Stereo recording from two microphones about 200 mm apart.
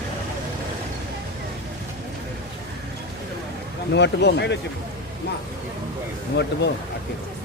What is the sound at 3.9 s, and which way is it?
Speech, 60° left (ahead or behind).